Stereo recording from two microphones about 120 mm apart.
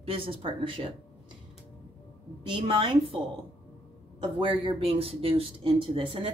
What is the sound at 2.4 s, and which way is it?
Speech, 45° right (ahead or behind).